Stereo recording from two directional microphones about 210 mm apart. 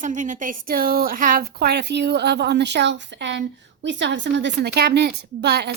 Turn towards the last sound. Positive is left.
turn(degrees=-50)  # may be behind; listen again after turning